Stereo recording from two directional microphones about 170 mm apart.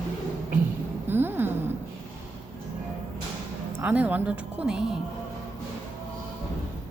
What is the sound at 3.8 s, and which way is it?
Speech, 10° right (ahead or behind).